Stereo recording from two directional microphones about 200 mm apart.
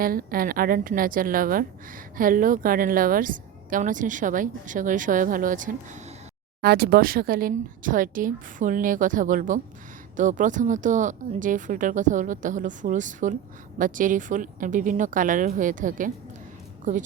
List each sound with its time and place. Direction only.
0.0 s a woman's voice: 45° right (ahead or behind)